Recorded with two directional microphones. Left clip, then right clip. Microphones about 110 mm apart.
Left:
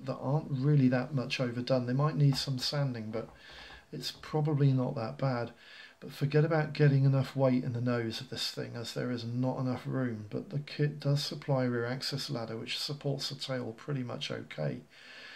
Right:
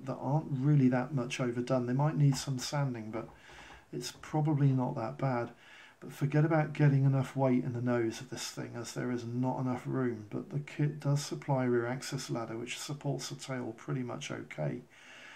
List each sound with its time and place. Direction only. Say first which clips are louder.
0.0 s speech: left 1 dB; 20° left (ahead or behind)
11.3 s speech: right 3 dB; 25° left (ahead or behind)
13.5 s speech: left 2 dB; 30° left (ahead or behind)